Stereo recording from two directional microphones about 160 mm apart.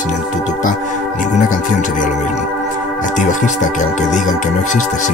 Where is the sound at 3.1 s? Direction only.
50° left (ahead or behind).